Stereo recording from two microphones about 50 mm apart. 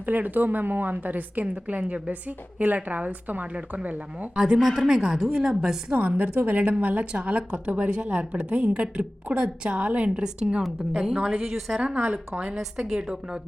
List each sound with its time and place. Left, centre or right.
0.0 s a woman's voice: right
4.5 s a woman's voice: centre
6.0 s a woman's voice: right
7.0 s a woman's voice: right
10.6 s a woman's voice: centre